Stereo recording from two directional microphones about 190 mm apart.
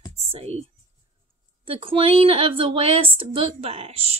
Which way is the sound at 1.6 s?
30° right (ahead or behind).